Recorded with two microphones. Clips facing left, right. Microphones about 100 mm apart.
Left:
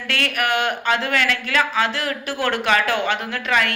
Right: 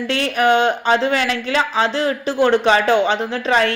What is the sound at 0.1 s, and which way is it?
Speech, 20° right (ahead or behind).